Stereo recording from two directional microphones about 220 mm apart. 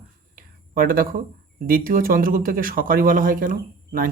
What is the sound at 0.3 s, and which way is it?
Speech, 40° right (ahead or behind).